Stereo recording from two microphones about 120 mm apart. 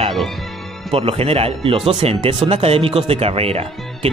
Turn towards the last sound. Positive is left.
turn(degrees=-55)  # may be behind; listen again after turning